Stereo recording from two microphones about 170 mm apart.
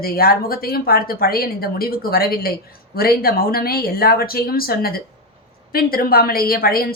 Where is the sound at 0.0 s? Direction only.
60° left (ahead or behind).